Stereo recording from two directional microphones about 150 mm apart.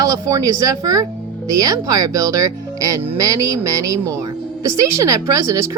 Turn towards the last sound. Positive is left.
turn(degrees=-20)  # may be behind; listen again after turning